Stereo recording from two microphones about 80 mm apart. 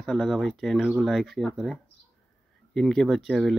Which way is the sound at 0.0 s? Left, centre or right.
Centre.